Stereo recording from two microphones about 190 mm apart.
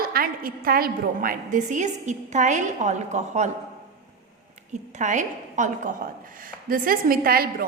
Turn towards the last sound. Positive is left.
turn(degrees=-50)  # may be behind; listen again after turning